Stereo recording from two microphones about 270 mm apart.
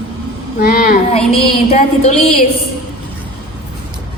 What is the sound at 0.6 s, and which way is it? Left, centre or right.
Child singing, left.